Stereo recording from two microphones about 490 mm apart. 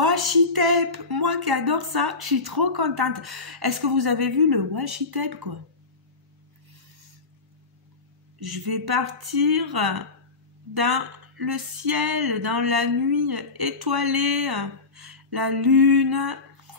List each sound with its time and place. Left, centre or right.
0.0 s speech: right
8.4 s speech: right